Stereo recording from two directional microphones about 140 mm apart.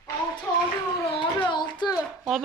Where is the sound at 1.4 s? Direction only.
30° left (ahead or behind).